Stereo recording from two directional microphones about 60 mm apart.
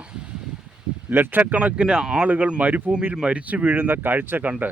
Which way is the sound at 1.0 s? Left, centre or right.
Right.